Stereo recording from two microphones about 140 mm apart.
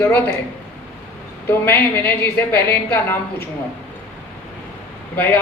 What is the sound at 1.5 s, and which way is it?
A woman's voice, 15° left (ahead or behind).